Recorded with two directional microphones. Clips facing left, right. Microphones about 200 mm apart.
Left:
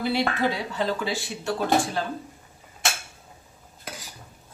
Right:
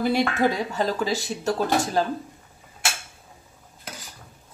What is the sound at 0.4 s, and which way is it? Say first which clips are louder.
Speech: right 3 dB; 40° right (ahead or behind).